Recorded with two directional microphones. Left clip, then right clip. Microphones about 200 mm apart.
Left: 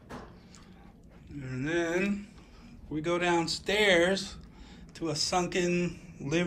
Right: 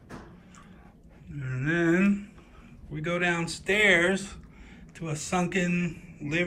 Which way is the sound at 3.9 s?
55° left (ahead or behind).